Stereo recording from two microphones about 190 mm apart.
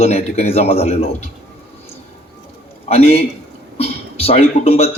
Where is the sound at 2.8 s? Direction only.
35° left (ahead or behind).